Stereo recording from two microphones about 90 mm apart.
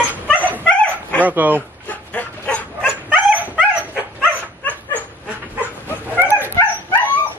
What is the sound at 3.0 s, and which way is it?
Dog, 15° right (ahead or behind).